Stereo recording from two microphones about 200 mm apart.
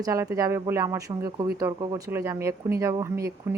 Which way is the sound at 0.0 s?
15° right (ahead or behind).